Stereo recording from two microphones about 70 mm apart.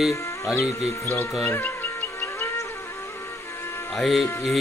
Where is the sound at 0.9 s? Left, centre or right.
Left.